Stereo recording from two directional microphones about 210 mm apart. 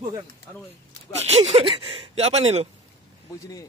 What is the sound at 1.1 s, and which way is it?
Speech, 30° right (ahead or behind).